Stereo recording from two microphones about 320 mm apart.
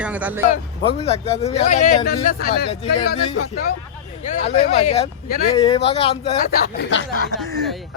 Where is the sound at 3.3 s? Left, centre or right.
Left.